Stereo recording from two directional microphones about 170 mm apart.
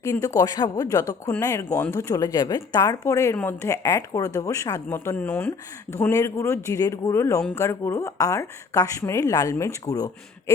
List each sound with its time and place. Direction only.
0.0 s a woman's voice: 15° left (ahead or behind)